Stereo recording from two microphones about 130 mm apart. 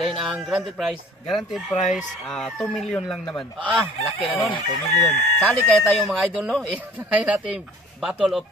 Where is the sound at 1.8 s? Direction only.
70° left (ahead or behind).